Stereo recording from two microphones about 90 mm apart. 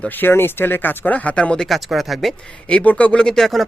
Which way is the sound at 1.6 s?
Centre (ahead or behind).